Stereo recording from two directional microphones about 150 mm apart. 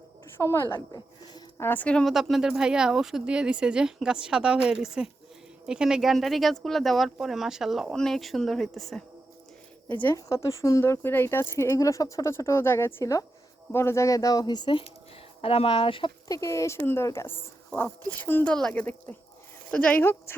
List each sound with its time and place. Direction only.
0.3 s speech: 15° left (ahead or behind)
0.9 s a sound: 30° left (ahead or behind)
1.6 s speech: 10° left (ahead or behind)
9.9 s speech: 15° left (ahead or behind); by 16.1 s 35° left (ahead or behind)
16.3 s speech: 20° left (ahead or behind)